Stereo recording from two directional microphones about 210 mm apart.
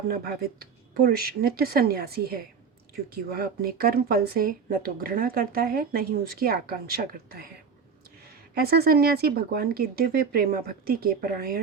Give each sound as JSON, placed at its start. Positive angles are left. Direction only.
{"t": 0.1, "sound": "speech", "side_deg": -45}
{"t": 8.5, "sound": "speech", "side_deg": -45}